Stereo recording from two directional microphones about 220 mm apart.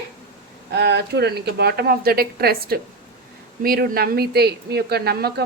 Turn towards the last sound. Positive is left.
turn(degrees=-45)  # may be behind; listen again after turning